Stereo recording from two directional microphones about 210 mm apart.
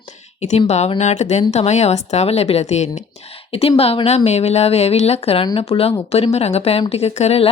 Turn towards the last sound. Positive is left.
turn(degrees=30)  # may be behind; listen again after turning